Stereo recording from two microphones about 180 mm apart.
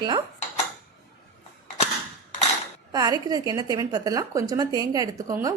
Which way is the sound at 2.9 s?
20° right (ahead or behind).